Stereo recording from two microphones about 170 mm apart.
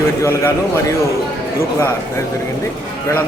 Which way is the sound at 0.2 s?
15° left (ahead or behind).